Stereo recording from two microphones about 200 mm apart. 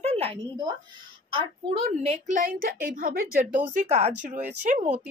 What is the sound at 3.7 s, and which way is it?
A woman's voice, 35° right (ahead or behind).